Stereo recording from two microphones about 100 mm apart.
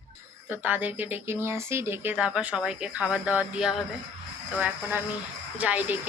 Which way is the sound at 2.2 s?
10° right (ahead or behind).